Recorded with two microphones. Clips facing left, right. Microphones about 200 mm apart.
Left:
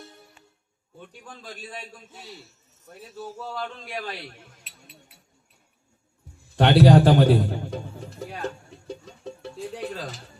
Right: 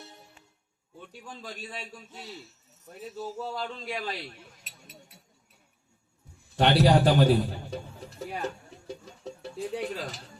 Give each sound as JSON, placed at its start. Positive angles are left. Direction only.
{"t": 3.3, "sound": "speech", "side_deg": -20}
{"t": 3.6, "sound": "a man's voice", "side_deg": 50}
{"t": 4.6, "sound": "chink", "side_deg": -40}
{"t": 6.6, "sound": "a sound", "side_deg": 55}